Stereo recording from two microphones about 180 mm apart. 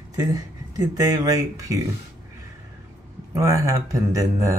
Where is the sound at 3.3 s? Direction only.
15° right (ahead or behind).